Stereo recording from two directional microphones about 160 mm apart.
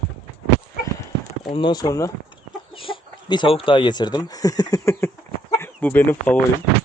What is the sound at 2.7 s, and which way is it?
Chicken, 35° left (ahead or behind).